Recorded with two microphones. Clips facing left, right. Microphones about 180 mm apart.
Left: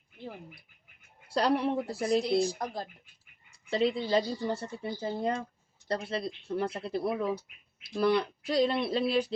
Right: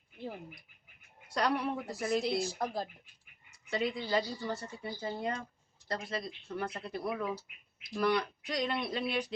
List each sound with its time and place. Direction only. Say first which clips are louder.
1.3 s speech: left 5 dB; 30° left (ahead or behind)
2.4 s speech: left 3 dB; 5° right (ahead or behind)
3.5 s speech: left 6 dB; 30° left (ahead or behind)